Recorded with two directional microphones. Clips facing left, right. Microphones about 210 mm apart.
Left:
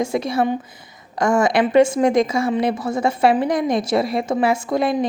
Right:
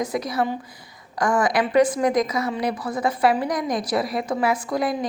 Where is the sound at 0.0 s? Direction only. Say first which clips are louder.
Left 4 dB; 25° left (ahead or behind).